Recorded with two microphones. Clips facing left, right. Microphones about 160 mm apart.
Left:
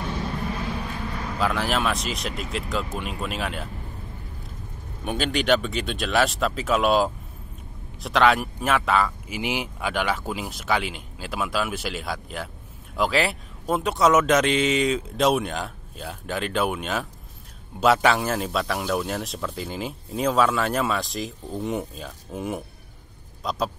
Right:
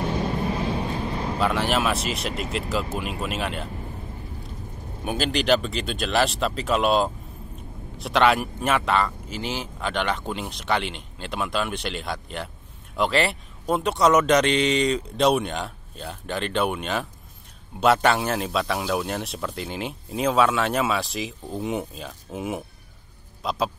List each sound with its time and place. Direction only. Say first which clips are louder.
0.0 s vehicle: right 4 dB; 25° right (ahead or behind)
1.4 s speech: right 1 dB; centre (ahead or behind)
5.0 s speech: even; centre (ahead or behind)
9.4 s speech: left 2 dB; 15° left (ahead or behind); by 22.6 s 5° right (ahead or behind)
23.4 s a sound: right 1 dB; centre (ahead or behind)